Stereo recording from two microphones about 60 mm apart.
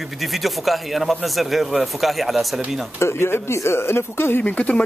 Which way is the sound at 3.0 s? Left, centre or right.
Left.